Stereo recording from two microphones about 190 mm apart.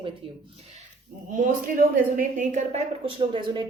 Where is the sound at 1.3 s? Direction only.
50° right (ahead or behind).